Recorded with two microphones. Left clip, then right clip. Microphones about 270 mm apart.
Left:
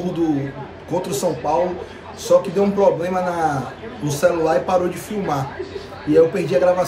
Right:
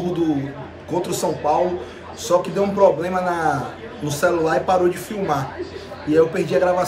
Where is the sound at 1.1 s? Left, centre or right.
Centre.